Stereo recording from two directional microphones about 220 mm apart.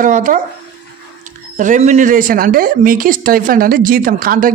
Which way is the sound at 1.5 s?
35° right (ahead or behind).